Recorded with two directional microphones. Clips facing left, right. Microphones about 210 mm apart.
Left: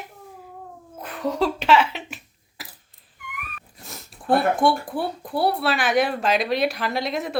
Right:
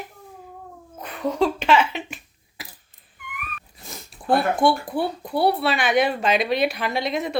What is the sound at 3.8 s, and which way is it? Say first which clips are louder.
Speech: even; centre (ahead or behind).